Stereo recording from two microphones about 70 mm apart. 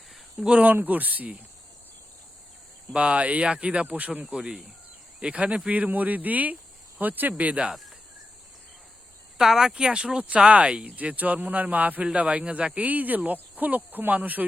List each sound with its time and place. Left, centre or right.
0.1 s a sound: centre
0.6 s speech: right
2.9 s speech: centre
7.7 s cricket: centre
9.4 s speech: centre; by 14.4 s right